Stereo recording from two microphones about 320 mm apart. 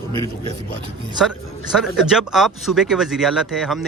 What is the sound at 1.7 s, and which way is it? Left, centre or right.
A man's voice, centre.